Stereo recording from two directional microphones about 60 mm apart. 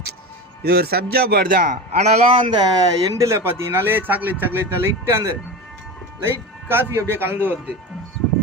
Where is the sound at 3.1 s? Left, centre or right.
Right.